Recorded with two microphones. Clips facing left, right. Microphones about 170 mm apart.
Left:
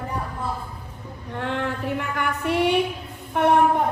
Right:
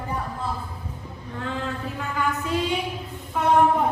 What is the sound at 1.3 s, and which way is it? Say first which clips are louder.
Female singing: left 3 dB; 70° left (ahead or behind).